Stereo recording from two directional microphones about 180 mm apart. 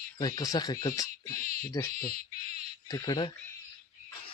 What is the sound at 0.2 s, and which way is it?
Speech, 20° left (ahead or behind).